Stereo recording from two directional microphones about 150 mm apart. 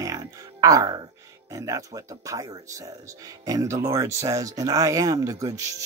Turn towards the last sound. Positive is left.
turn(degrees=-20)  # may be behind; listen again after turning